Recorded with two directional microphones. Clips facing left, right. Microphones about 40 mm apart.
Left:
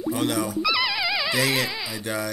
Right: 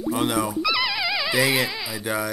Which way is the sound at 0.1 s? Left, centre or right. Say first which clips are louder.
Right 2 dB; centre.